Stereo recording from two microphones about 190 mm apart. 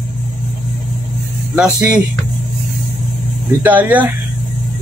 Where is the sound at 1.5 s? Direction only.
5° right (ahead or behind).